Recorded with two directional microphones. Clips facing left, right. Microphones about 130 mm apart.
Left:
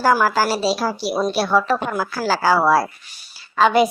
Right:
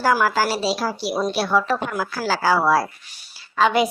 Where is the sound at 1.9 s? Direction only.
35° left (ahead or behind).